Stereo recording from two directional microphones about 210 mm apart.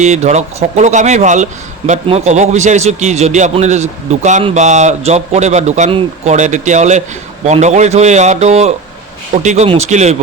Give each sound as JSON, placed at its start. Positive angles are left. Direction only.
{"t": 0.0, "sound": "a man's voice", "side_deg": -35}